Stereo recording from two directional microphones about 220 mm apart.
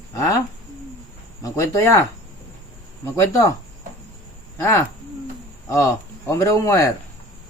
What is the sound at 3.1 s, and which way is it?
Speech, 15° left (ahead or behind).